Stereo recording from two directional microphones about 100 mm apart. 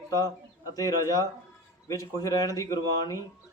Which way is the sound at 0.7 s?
35° left (ahead or behind).